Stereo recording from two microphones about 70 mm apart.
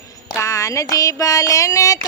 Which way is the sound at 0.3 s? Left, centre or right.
Left.